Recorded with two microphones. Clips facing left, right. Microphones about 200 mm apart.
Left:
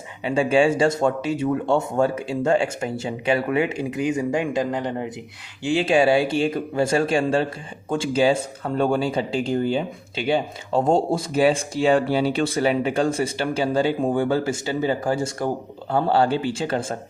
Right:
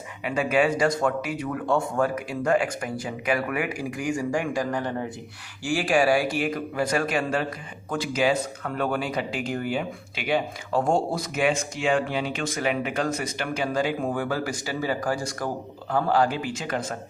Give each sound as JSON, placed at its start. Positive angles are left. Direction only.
{"t": 0.3, "sound": "speech", "side_deg": 30}